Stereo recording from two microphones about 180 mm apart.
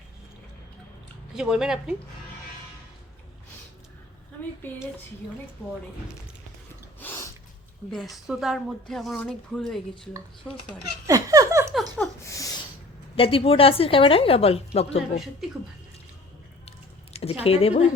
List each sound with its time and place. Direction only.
1.4 s speech: 5° right (ahead or behind)
7.9 s speech: centre (ahead or behind)
11.0 s laughter: 20° right (ahead or behind)
11.7 s speech: centre (ahead or behind)
12.2 s a sound: 15° left (ahead or behind)
13.1 s a woman's voice: 30° left (ahead or behind)
16.6 s a sound: 35° left (ahead or behind)
17.4 s a woman's voice: 35° left (ahead or behind)